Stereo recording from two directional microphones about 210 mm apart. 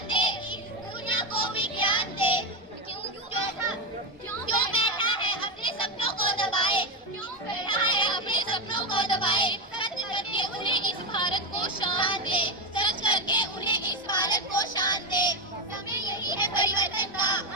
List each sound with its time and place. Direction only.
0.1 s music: 20° left (ahead or behind)
1.1 s child singing: 25° left (ahead or behind)
4.4 s chatter: 25° left (ahead or behind)
7.6 s music: 20° left (ahead or behind)
16.0 s children playing: 20° left (ahead or behind)